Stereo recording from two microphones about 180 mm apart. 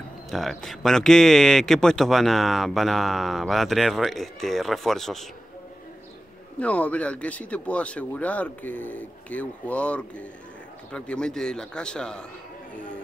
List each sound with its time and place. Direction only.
0.3 s speech: centre (ahead or behind)
6.6 s speech: 5° left (ahead or behind)